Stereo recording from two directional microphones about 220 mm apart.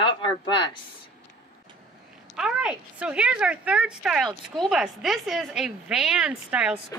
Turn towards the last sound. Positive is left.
turn(degrees=-5)  # may be behind; listen again after turning